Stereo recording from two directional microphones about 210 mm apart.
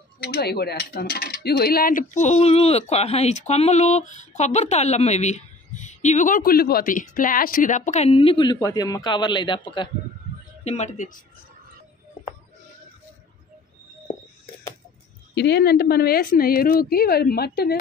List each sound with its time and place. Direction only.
0.2 s speech: 50° left (ahead or behind); by 11.1 s 35° left (ahead or behind)
15.3 s a woman's voice: 55° left (ahead or behind)